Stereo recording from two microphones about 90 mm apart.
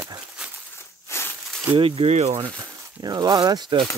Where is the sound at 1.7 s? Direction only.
85° right.